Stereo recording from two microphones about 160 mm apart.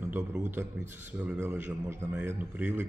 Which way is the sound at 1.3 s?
10° right (ahead or behind).